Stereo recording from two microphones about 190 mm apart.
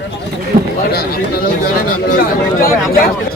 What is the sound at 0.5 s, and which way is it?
Speech, 55° right (ahead or behind).